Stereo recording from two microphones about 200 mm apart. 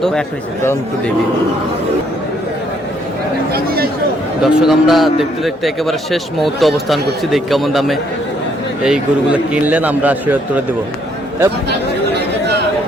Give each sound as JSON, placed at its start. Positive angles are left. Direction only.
{"t": 0.0, "sound": "a man's voice", "side_deg": 5}
{"t": 3.5, "sound": "speech", "side_deg": -50}
{"t": 4.4, "sound": "a man's voice", "side_deg": 0}